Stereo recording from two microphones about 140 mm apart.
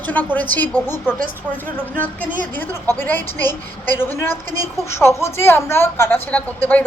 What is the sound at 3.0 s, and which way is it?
A woman's voice, 15° left (ahead or behind).